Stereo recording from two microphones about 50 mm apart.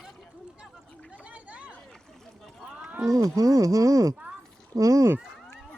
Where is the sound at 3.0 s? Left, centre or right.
Right.